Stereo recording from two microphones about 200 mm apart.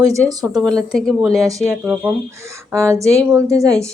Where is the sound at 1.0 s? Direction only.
5° left (ahead or behind).